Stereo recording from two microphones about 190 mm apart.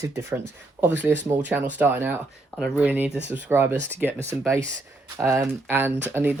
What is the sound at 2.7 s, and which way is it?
Speech, 10° right (ahead or behind).